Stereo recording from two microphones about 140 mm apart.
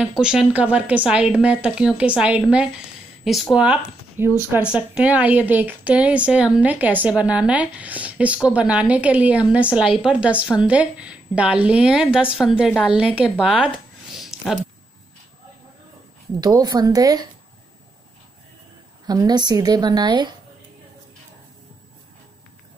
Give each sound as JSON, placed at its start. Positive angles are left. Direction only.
{"t": 0.0, "sound": "speech", "side_deg": -5}
{"t": 14.1, "sound": "a sound", "side_deg": 0}
{"t": 16.3, "sound": "speech", "side_deg": -30}
{"t": 19.0, "sound": "speech", "side_deg": -30}